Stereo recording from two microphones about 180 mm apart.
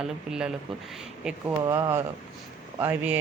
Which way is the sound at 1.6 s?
20° right (ahead or behind).